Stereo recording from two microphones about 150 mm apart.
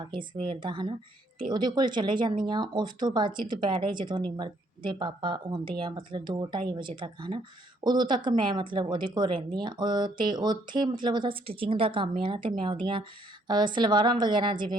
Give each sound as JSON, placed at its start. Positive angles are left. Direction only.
{"t": 0.0, "sound": "a woman's voice", "side_deg": -35}